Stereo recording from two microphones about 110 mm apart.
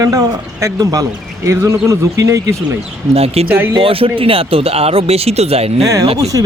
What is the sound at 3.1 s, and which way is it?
Speech, 65° right (ahead or behind).